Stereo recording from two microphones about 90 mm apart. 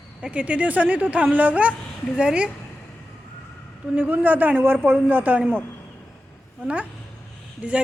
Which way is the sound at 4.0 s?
20° right (ahead or behind).